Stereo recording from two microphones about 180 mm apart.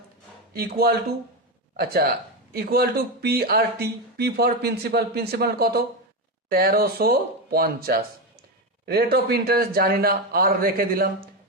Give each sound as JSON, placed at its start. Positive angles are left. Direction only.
{"t": 0.5, "sound": "speech", "side_deg": -60}